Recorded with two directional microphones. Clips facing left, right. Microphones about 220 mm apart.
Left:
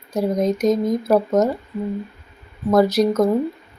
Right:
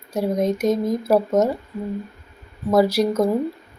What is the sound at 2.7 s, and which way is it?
Speech, 5° right (ahead or behind).